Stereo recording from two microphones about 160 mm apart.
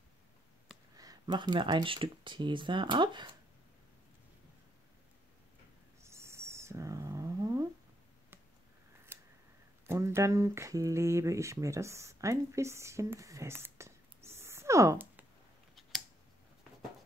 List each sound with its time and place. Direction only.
0.9 s speech: 25° right (ahead or behind)
6.0 s a sound: 15° right (ahead or behind)
9.8 s speech: 15° right (ahead or behind)